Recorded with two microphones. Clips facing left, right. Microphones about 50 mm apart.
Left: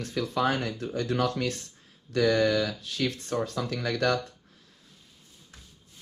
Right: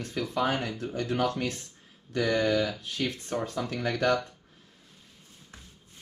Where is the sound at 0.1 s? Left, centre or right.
Left.